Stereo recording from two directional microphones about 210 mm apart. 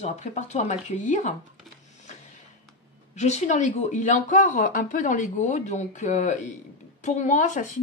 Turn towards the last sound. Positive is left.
turn(degrees=35)  # may be behind; listen again after turning